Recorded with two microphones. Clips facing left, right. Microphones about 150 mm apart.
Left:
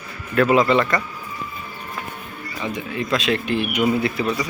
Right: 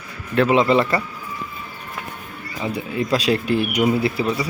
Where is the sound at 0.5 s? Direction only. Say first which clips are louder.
Right 1 dB; 25° right (ahead or behind).